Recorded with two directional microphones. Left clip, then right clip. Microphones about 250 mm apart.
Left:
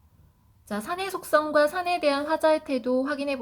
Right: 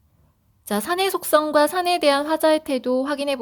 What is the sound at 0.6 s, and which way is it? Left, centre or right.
A woman's voice, right.